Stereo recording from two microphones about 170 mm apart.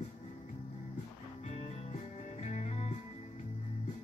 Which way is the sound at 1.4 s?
40° left (ahead or behind).